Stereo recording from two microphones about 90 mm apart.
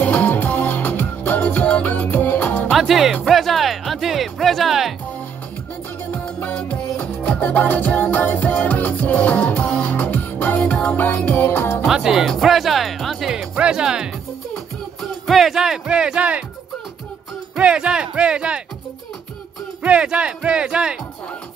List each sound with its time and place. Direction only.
0.0 s music: 20° left (ahead or behind)
2.7 s music: centre (ahead or behind)
6.1 s music: 15° left (ahead or behind)
11.8 s music: 5° right (ahead or behind)
17.6 s speech: 10° right (ahead or behind)
19.8 s speech: 10° right (ahead or behind)